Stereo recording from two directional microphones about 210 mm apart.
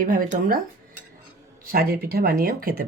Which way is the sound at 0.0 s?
40° right (ahead or behind).